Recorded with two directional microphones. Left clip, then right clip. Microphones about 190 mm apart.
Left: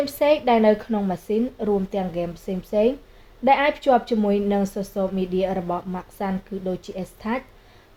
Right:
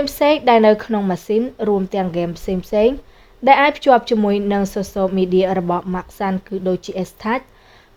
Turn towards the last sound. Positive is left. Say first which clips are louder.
# right 7 dB
turn(degrees=-50)  # may be behind; listen again after turning